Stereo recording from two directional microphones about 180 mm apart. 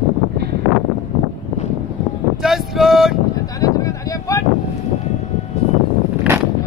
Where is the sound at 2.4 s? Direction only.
Centre (ahead or behind).